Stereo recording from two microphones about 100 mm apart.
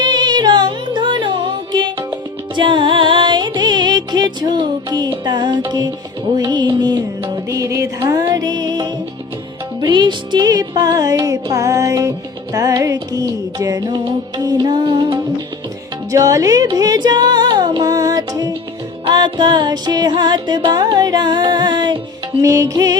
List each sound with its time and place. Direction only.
0.0 s music: 45° right (ahead or behind)
16.1 s music: 35° right (ahead or behind)
19.0 s music: 50° right (ahead or behind)
22.4 s music: 35° right (ahead or behind)